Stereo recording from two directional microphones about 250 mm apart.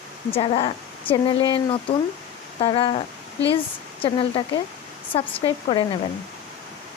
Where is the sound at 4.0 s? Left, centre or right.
Left.